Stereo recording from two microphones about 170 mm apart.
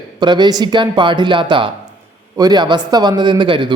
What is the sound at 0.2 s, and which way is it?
A man's voice, 25° right (ahead or behind).